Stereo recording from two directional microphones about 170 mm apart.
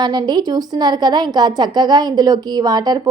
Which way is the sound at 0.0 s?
25° right (ahead or behind).